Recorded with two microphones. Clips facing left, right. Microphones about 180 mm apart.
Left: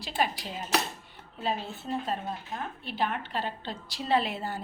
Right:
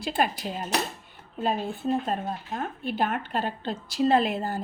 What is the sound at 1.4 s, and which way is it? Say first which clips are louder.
A woman's voice: right 5 dB; 50° right (ahead or behind).